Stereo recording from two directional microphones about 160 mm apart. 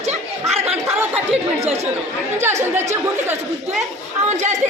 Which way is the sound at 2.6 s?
15° right (ahead or behind).